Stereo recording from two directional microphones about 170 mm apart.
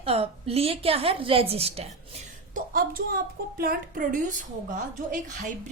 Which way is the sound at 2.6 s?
60° right (ahead or behind).